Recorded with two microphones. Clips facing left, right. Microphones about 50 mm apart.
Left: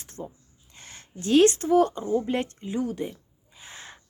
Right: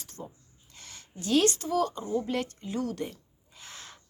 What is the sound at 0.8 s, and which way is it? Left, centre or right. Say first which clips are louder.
Speech: left 3 dB; left.